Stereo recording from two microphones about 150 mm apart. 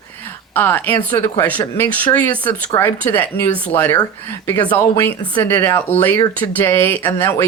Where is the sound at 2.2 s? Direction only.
10° left (ahead or behind).